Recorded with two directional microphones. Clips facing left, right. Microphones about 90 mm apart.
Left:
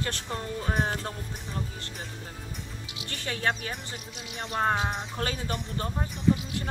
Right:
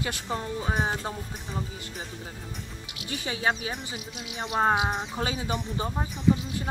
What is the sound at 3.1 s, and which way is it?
Speech, 5° right (ahead or behind).